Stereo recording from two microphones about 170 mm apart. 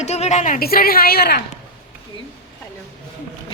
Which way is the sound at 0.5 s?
60° left (ahead or behind).